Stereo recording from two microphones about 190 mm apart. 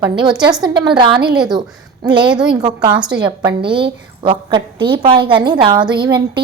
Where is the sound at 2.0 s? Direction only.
25° right (ahead or behind).